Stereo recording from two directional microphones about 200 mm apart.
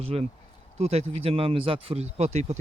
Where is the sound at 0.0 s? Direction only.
30° right (ahead or behind).